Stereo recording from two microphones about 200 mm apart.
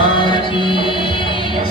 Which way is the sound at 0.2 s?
25° left (ahead or behind).